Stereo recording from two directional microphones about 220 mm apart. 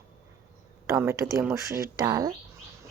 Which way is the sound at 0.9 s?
15° right (ahead or behind).